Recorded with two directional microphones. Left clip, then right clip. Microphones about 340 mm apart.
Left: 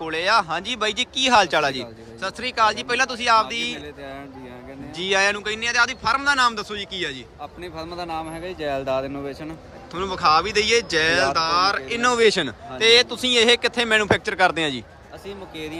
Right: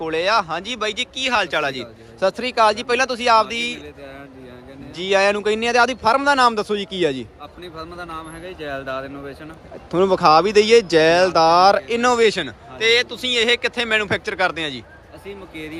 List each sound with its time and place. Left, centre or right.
0.0 s speech: centre
4.9 s speech: centre
7.6 s speech: left
9.9 s speech: centre